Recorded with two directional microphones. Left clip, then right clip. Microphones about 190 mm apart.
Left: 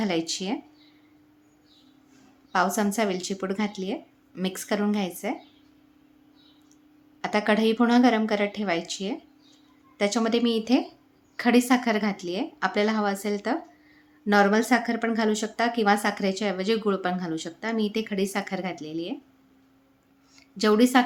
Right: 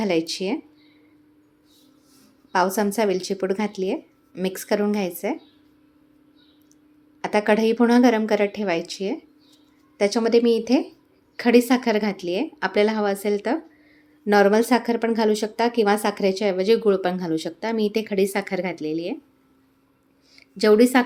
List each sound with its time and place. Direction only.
0.0 s speech: 15° right (ahead or behind)
2.7 s speech: 10° right (ahead or behind)
7.2 s speech: 15° right (ahead or behind)
10.2 s a woman's voice: 10° right (ahead or behind)
20.3 s speech: 10° right (ahead or behind)